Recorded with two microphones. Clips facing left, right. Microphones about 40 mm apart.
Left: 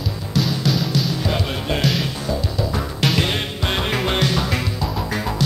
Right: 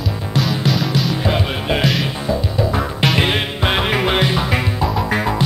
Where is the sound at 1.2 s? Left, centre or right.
Right.